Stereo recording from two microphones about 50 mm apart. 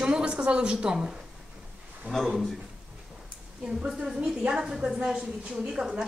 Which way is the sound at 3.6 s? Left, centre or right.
Centre.